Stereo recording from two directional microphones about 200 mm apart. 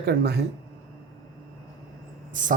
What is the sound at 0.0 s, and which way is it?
Speech, 55° right (ahead or behind).